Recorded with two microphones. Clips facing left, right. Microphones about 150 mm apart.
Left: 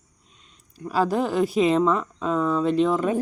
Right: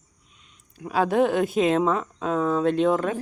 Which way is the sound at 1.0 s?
60° right (ahead or behind).